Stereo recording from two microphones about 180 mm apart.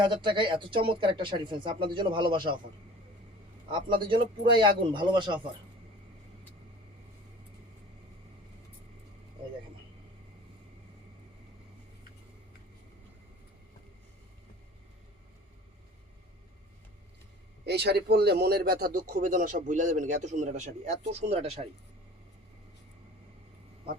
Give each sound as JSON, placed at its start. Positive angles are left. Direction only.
{"t": 0.0, "sound": "speech", "side_deg": -25}
{"t": 3.7, "sound": "speech", "side_deg": -25}
{"t": 17.7, "sound": "a man's voice", "side_deg": -65}